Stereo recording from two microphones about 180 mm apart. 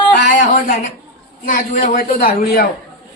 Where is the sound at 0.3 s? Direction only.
45° left (ahead or behind).